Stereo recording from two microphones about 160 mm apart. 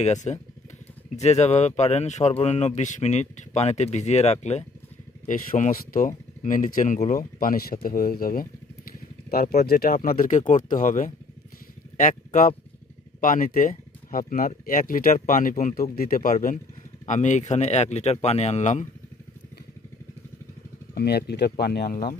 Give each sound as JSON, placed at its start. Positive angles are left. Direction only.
{"t": 0.0, "sound": "a man's voice", "side_deg": 45}
{"t": 9.9, "sound": "a man's voice", "side_deg": 60}
{"t": 15.7, "sound": "a man's voice", "side_deg": 65}
{"t": 20.9, "sound": "speech", "side_deg": 80}